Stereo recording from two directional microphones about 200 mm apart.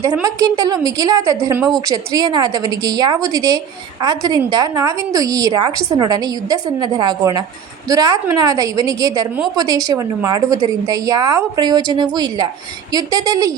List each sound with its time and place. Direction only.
0.0 s a woman's voice: 15° right (ahead or behind)